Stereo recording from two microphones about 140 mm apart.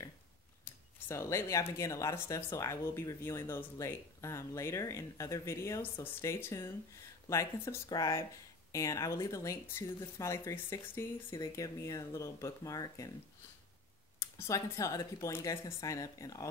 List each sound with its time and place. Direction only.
1.0 s speech: 20° left (ahead or behind)
11.2 s speech: 25° left (ahead or behind)
14.4 s speech: 25° left (ahead or behind)